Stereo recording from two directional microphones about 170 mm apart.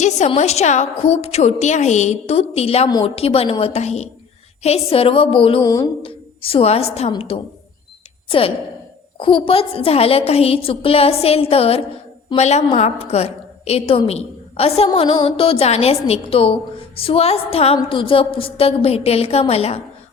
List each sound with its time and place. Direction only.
0.3 s a woman's voice: 40° left (ahead or behind)